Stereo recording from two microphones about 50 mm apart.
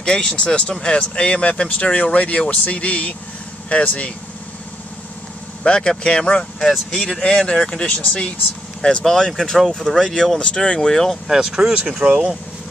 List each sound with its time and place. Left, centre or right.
0.0 s speech: centre
5.6 s speech: centre
7.9 s speech: left
8.8 s speech: centre
11.2 s speech: centre